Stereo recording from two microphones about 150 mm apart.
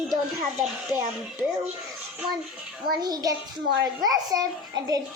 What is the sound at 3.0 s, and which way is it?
A child's voice, 25° right (ahead or behind).